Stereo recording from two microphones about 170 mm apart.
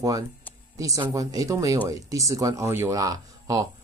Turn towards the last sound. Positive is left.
turn(degrees=-20)  # may be behind; listen again after turning